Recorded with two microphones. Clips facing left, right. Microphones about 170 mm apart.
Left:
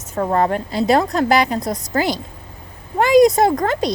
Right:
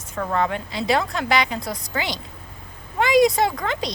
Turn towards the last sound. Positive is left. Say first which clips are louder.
# left 7 dB
turn(degrees=45)  # may be behind; listen again after turning